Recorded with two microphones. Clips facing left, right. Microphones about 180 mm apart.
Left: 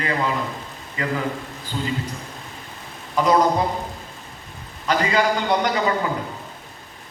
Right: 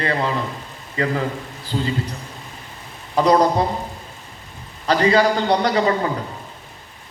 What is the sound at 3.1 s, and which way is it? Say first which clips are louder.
Speech: right 2 dB; 35° right (ahead or behind).